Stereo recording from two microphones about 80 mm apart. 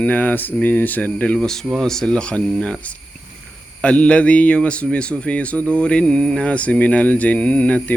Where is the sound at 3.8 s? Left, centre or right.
Centre.